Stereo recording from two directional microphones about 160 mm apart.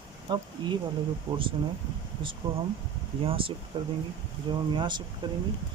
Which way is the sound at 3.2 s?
35° right (ahead or behind).